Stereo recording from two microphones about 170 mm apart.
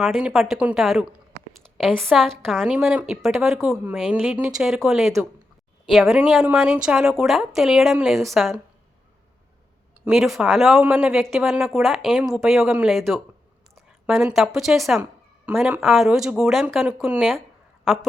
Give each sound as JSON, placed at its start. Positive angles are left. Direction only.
{"t": 0.0, "sound": "a woman's voice", "side_deg": -5}
{"t": 10.1, "sound": "a woman's voice", "side_deg": 0}